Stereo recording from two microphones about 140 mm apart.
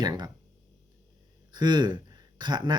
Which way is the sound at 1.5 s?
30° right (ahead or behind).